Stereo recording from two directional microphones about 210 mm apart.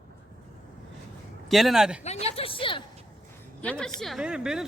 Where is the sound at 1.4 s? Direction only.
Centre (ahead or behind).